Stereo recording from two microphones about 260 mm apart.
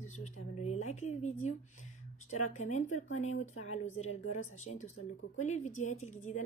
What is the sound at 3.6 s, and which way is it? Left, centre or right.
A woman's voice, left.